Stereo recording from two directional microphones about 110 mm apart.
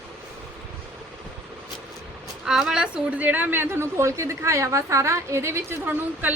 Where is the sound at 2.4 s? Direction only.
5° right (ahead or behind).